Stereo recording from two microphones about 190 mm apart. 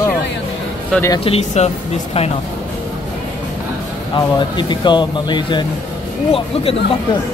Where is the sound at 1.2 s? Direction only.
35° left (ahead or behind).